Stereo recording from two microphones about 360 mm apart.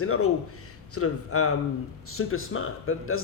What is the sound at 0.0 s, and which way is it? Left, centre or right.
A man's voice, left.